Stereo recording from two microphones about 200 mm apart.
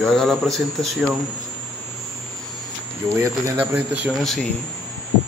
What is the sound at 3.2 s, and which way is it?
Speech, 10° right (ahead or behind).